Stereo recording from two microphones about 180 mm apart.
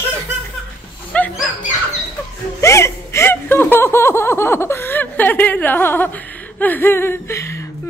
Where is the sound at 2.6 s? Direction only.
15° left (ahead or behind).